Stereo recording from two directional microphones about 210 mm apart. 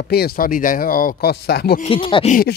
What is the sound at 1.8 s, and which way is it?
Speech, 25° left (ahead or behind).